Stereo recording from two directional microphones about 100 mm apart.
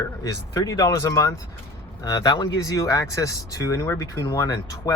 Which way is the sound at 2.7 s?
35° left (ahead or behind).